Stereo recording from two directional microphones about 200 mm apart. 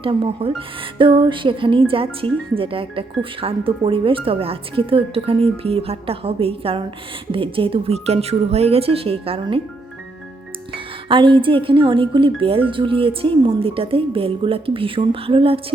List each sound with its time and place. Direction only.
0.0 s speech: 25° right (ahead or behind)
11.1 s speech: 25° right (ahead or behind)